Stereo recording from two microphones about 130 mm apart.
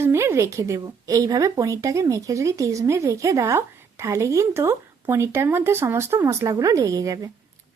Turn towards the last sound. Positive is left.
turn(degrees=-25)  # may be behind; listen again after turning